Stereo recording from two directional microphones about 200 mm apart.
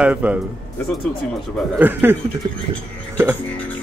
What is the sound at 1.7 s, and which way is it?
Speech, 10° right (ahead or behind).